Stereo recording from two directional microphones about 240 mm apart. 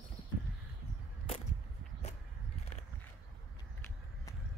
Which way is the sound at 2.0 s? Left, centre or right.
Left.